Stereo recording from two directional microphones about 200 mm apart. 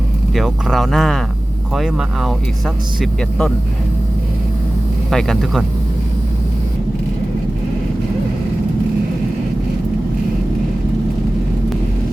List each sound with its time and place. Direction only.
0.3 s speech: centre (ahead or behind)
5.1 s speech: centre (ahead or behind)